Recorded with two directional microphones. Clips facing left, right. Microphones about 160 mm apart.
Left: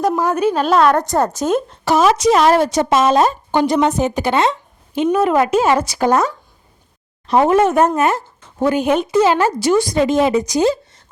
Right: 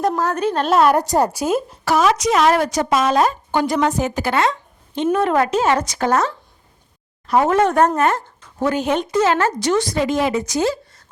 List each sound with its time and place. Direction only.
0.2 s a woman's voice: 10° left (ahead or behind); by 1.8 s 5° right (ahead or behind)
1.8 s a woman's voice: 25° left (ahead or behind)
5.1 s a woman's voice: 5° left (ahead or behind); by 7.5 s 20° left (ahead or behind)
7.5 s a woman's voice: 10° left (ahead or behind)
10.0 s a woman's voice: 25° left (ahead or behind)